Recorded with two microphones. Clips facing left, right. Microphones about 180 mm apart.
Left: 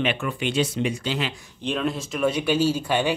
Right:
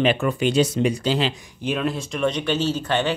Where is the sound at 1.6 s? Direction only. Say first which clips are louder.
Right 2 dB; 5° right (ahead or behind).